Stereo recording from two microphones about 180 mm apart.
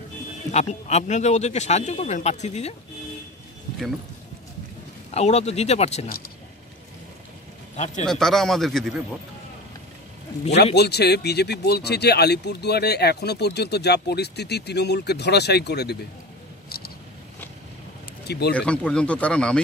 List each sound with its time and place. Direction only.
0.5 s speech: 40° left (ahead or behind)
5.1 s speech: 35° left (ahead or behind)
7.7 s speech: 40° left (ahead or behind)
8.0 s speech: 5° left (ahead or behind)
10.5 s speech: 65° left (ahead or behind)
16.6 s a sound: 60° left (ahead or behind)
18.2 s speech: 65° left (ahead or behind)
18.5 s speech: 5° left (ahead or behind)